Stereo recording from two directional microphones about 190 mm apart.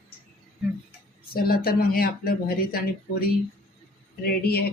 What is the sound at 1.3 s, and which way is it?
Speech, 50° left (ahead or behind).